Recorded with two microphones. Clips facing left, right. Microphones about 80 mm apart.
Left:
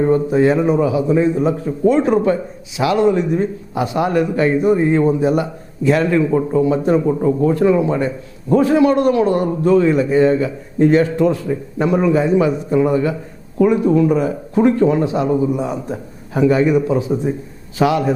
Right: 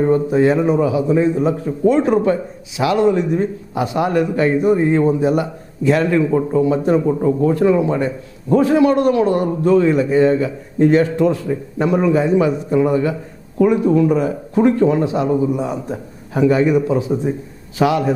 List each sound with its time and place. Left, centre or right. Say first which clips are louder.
0.0 s a man's voice: even; left
3.8 s a man's voice: even; left
4.1 s a man's voice: even; left